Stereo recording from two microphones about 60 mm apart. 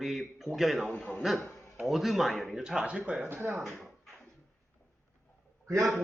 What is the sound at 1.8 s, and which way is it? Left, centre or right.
Speech, centre.